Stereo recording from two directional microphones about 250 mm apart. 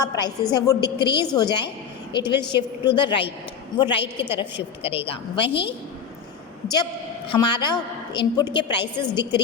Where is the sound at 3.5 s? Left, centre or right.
Centre.